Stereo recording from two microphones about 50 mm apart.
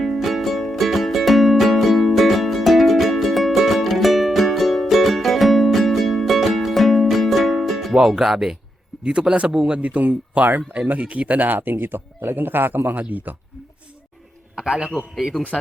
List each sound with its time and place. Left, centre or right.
0.0 s music: centre
7.9 s speech: centre
9.7 s speech: right
14.5 s a sound: centre
15.1 s speech: centre